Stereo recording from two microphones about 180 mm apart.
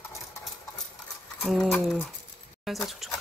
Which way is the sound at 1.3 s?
Centre (ahead or behind).